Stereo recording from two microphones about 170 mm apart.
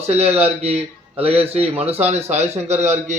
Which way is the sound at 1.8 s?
35° right (ahead or behind).